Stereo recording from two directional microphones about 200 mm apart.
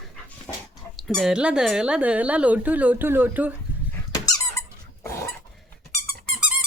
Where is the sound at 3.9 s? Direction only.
15° left (ahead or behind).